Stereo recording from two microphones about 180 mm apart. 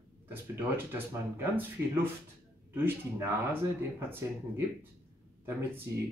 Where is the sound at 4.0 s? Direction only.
10° right (ahead or behind).